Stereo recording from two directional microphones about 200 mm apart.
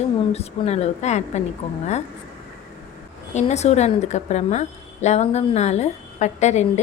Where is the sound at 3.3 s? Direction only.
35° left (ahead or behind).